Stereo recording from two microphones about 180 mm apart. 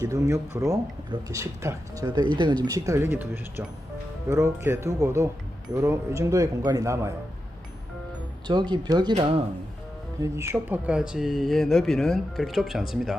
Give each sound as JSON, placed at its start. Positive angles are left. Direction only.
{"t": 0.0, "sound": "speech", "side_deg": -20}
{"t": 8.4, "sound": "speech", "side_deg": -25}
{"t": 10.2, "sound": "speech", "side_deg": -15}